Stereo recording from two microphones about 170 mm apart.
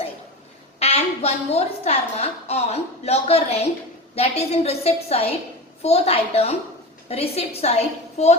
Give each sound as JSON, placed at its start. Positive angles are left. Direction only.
{"t": 0.8, "sound": "a woman's voice", "side_deg": 35}